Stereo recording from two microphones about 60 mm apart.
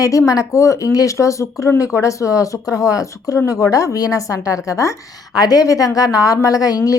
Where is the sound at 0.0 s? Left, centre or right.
Left.